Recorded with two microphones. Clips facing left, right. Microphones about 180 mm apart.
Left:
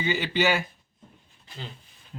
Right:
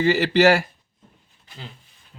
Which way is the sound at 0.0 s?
80° right.